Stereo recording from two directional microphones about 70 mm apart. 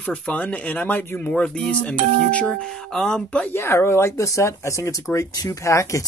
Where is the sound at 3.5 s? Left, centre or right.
Left.